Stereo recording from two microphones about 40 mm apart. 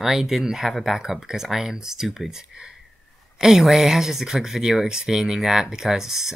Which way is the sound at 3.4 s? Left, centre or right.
Centre.